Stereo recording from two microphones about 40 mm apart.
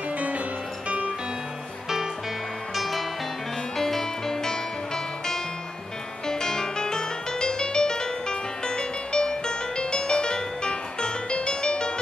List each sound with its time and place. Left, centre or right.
0.8 s music: right
2.7 s music: centre; by 11.9 s left